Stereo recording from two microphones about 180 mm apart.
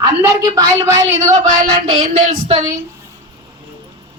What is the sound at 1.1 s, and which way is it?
Speech, 45° right (ahead or behind).